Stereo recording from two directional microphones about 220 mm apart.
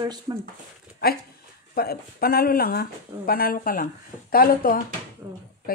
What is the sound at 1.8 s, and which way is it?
Speech, 45° left (ahead or behind).